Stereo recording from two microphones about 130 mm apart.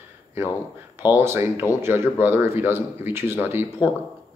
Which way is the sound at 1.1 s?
20° right (ahead or behind).